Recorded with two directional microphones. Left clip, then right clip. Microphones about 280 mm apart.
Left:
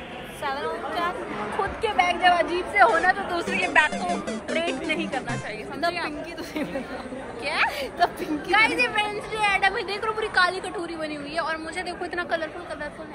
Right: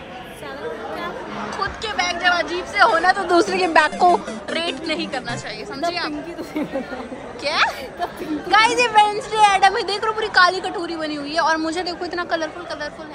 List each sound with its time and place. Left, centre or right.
1.6 s speech: centre